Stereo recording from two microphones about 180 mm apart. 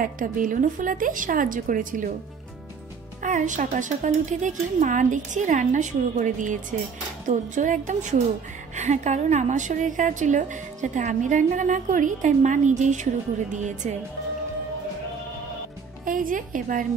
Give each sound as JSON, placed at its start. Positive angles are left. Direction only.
{"t": 0.0, "sound": "a woman's voice", "side_deg": -50}
{"t": 3.2, "sound": "a woman's voice", "side_deg": -45}
{"t": 16.1, "sound": "a woman's voice", "side_deg": -50}